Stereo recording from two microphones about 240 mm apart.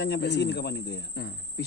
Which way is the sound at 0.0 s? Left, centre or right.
Left.